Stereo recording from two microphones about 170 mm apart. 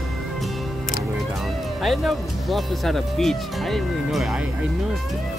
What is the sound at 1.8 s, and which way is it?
Speech, centre (ahead or behind).